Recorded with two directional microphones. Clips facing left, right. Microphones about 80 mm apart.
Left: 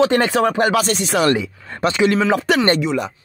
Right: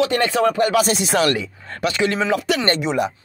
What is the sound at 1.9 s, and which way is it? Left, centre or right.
Speech, centre.